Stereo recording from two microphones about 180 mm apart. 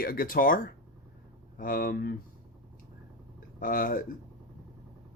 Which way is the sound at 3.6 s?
50° left (ahead or behind).